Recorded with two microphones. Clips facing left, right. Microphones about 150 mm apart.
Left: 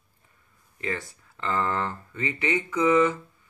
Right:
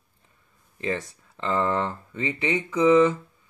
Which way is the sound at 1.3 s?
25° right (ahead or behind).